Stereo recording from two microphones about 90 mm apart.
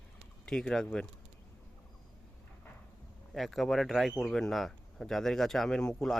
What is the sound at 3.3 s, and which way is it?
Speech, centre (ahead or behind).